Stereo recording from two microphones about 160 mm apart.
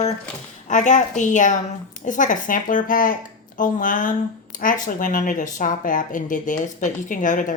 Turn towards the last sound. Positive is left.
turn(degrees=55)  # may be behind; listen again after turning